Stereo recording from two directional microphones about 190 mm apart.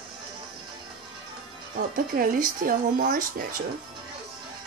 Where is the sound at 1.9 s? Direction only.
45° right (ahead or behind).